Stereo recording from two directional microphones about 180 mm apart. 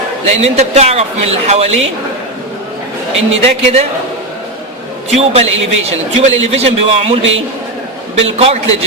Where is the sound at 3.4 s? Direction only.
35° right (ahead or behind).